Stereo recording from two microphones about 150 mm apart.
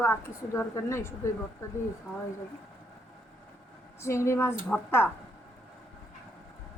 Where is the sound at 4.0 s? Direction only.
20° left (ahead or behind).